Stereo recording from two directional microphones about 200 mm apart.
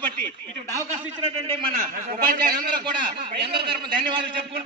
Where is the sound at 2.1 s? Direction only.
45° right (ahead or behind).